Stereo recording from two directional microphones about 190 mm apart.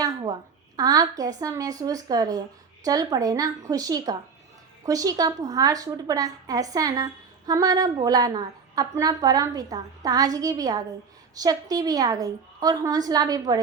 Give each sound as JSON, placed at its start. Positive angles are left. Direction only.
{"t": 0.8, "sound": "a woman's voice", "side_deg": -20}